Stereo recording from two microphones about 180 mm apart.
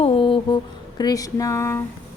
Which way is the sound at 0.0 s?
30° left (ahead or behind).